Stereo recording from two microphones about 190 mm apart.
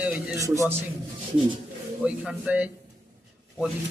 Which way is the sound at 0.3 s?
15° right (ahead or behind).